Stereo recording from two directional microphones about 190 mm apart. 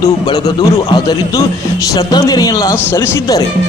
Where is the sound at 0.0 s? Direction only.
20° left (ahead or behind).